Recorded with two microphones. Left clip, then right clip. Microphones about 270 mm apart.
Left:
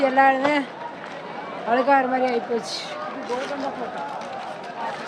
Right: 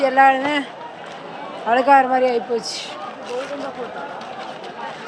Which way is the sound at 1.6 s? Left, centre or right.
Centre.